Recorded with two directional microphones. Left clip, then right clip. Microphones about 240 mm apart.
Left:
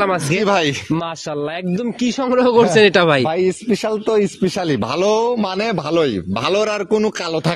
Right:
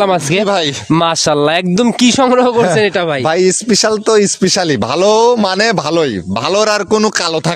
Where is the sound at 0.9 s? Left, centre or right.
Right.